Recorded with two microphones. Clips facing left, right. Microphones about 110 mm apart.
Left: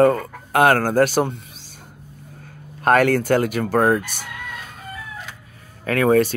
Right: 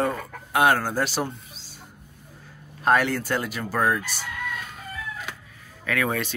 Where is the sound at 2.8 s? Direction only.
55° left (ahead or behind).